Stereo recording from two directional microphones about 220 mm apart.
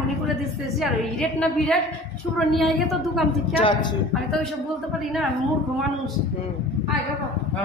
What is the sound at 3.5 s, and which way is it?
Speech, 25° left (ahead or behind).